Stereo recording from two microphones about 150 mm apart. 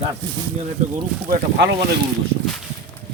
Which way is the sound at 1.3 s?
90° right.